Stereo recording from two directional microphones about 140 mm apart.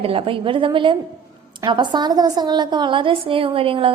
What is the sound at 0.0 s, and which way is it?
A woman's voice, 40° right (ahead or behind).